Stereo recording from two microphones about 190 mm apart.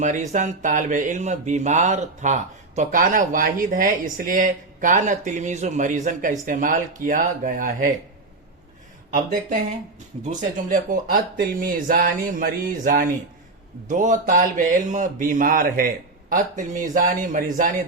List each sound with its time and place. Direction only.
0.0 s speech: 40° right (ahead or behind)
9.0 s speech: 45° right (ahead or behind)